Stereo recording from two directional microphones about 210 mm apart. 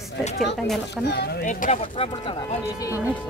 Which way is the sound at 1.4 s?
35° left (ahead or behind).